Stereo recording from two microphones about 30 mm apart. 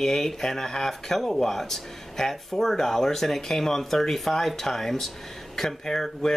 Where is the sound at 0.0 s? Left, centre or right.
Centre.